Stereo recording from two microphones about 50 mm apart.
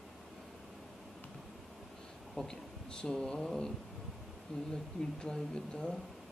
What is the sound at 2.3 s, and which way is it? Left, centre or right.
Speech, centre.